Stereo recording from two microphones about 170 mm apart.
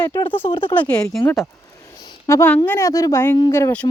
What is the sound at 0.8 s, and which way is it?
Speech, 5° left (ahead or behind).